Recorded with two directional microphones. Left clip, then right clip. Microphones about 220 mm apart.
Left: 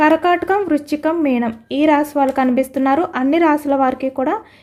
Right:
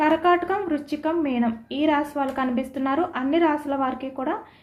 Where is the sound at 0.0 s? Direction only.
50° left (ahead or behind).